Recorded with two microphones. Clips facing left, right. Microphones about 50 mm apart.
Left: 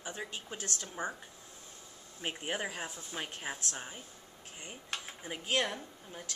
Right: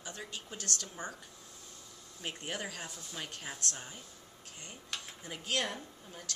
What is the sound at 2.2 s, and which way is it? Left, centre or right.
Speech, left.